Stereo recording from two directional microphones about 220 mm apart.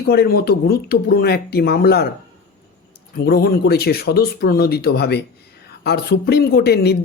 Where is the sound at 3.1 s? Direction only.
45° left (ahead or behind).